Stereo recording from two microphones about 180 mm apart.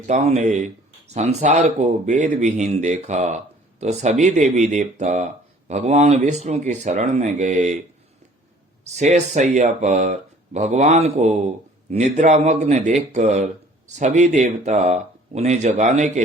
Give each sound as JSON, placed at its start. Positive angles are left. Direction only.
{"t": 0.1, "sound": "speech", "side_deg": -40}
{"t": 8.9, "sound": "speech", "side_deg": -40}